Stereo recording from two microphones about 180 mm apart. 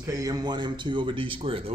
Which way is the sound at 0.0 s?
20° right (ahead or behind).